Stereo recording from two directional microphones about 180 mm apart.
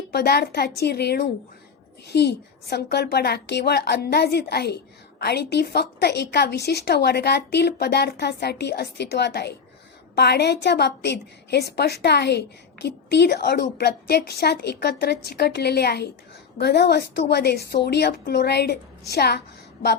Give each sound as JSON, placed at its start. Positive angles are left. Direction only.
{"t": 0.1, "sound": "a woman's voice", "side_deg": 65}